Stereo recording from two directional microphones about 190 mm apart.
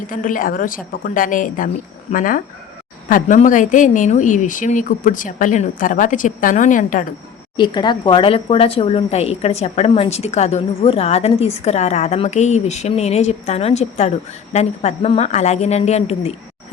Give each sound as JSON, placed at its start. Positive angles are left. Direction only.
{"t": 0.1, "sound": "speech", "side_deg": 45}
{"t": 7.5, "sound": "a woman's voice", "side_deg": 25}